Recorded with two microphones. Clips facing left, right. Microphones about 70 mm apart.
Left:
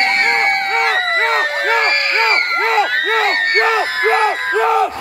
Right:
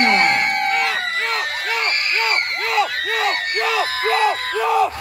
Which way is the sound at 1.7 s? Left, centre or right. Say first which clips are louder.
Left 5 dB; left.